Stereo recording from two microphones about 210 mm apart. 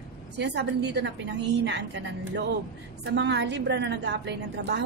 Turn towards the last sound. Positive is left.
turn(degrees=-55)  # may be behind; listen again after turning